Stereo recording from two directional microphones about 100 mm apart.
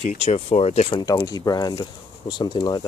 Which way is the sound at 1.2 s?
35° left (ahead or behind).